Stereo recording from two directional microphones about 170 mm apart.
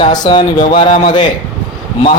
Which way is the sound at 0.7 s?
35° left (ahead or behind).